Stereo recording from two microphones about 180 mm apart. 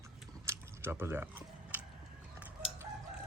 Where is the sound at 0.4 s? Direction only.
15° right (ahead or behind).